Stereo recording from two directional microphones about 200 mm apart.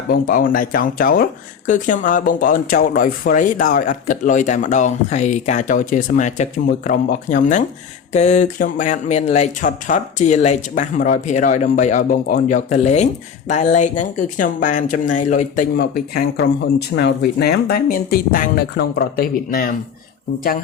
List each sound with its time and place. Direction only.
0.1 s speech: 45° left (ahead or behind)
15.8 s speech: 55° left (ahead or behind)